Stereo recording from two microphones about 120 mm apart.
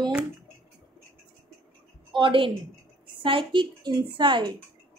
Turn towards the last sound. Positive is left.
turn(degrees=-40)  # may be behind; listen again after turning